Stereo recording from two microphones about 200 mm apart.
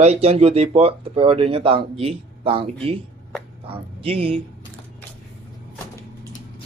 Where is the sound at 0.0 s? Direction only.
30° right (ahead or behind).